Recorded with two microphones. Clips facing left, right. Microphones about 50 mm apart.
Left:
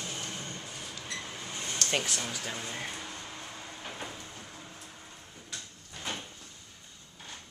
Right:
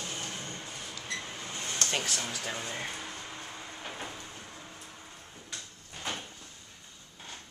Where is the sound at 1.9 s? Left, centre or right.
Centre.